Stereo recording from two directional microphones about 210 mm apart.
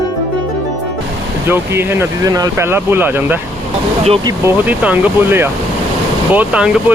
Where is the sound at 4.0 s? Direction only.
30° right (ahead or behind).